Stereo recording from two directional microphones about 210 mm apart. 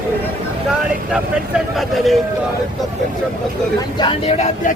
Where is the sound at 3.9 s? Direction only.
25° left (ahead or behind).